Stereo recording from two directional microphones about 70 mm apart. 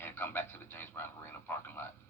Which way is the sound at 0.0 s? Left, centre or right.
Left.